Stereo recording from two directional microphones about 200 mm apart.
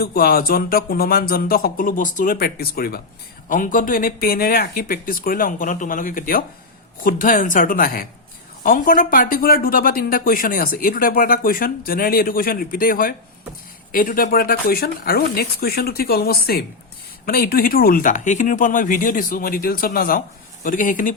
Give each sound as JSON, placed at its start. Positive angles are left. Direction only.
{"t": 0.0, "sound": "speech", "side_deg": 50}